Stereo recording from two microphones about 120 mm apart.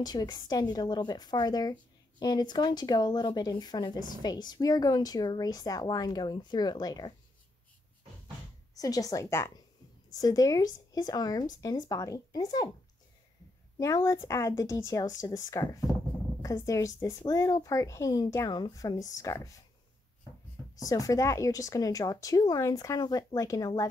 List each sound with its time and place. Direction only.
0.0 s speech: 35° left (ahead or behind)
8.7 s speech: 30° left (ahead or behind)
13.7 s speech: 25° left (ahead or behind)
20.7 s speech: 30° left (ahead or behind)